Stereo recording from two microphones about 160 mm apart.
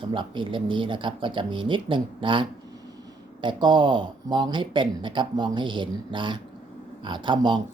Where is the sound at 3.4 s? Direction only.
30° right (ahead or behind).